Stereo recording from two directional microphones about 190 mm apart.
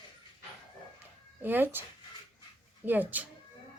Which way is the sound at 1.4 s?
10° right (ahead or behind).